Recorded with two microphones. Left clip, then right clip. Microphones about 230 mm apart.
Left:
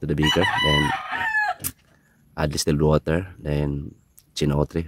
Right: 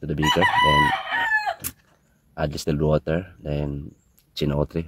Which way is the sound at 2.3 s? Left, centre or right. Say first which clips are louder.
Left 2 dB; centre.